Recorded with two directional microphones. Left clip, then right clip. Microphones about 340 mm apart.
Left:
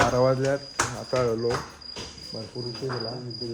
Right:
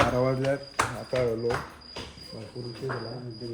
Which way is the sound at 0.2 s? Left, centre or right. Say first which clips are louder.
Left 4 dB; centre.